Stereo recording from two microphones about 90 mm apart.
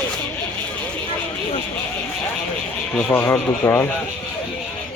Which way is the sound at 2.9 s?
25° left (ahead or behind).